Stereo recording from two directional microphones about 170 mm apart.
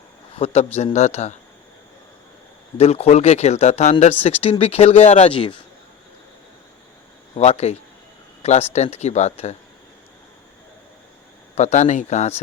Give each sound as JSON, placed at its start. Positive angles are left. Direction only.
{"t": 0.3, "sound": "speech", "side_deg": 35}
{"t": 2.7, "sound": "speech", "side_deg": 35}
{"t": 7.3, "sound": "speech", "side_deg": 40}
{"t": 11.5, "sound": "a man's voice", "side_deg": 45}